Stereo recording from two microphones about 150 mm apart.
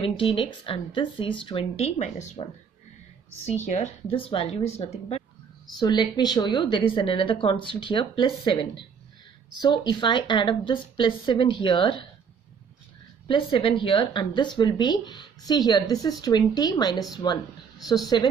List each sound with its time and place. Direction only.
0.0 s a woman's voice: 35° left (ahead or behind)
3.6 s speech: 55° left (ahead or behind)
4.1 s a woman's voice: 35° left (ahead or behind)
5.8 s a woman's voice: 30° left (ahead or behind)
9.6 s a woman's voice: 30° left (ahead or behind)
13.3 s speech: 35° left (ahead or behind)